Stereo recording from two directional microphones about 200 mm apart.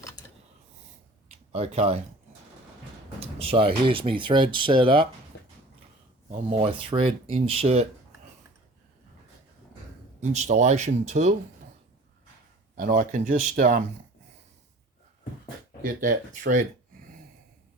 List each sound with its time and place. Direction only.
1.3 s speech: 30° right (ahead or behind)
3.2 s a sound: 30° right (ahead or behind)
3.8 s speech: 25° right (ahead or behind)
5.3 s a sound: 60° left (ahead or behind)
6.3 s speech: 30° right (ahead or behind)
10.2 s speech: 35° right (ahead or behind)
12.7 s speech: 45° right (ahead or behind)
16.0 s speech: 45° right (ahead or behind)